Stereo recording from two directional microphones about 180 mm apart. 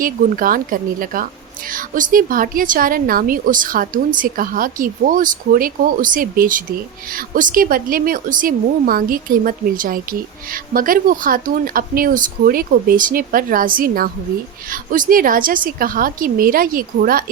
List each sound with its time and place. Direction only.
0.0 s a woman's voice: 50° right (ahead or behind)